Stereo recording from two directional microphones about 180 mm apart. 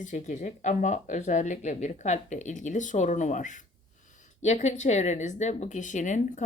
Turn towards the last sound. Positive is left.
turn(degrees=45)  # may be behind; listen again after turning